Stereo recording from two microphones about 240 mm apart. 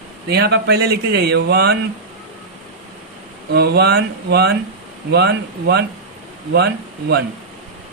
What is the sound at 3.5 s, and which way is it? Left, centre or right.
Speech, right.